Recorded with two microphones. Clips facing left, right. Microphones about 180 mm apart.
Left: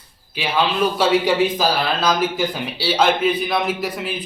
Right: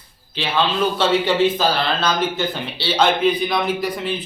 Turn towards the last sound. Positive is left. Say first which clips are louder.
# right 1 dB
turn(degrees=5)  # may be behind; listen again after turning